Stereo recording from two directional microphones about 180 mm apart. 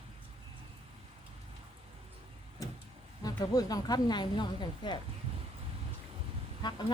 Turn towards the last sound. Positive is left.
turn(degrees=25)  # may be behind; listen again after turning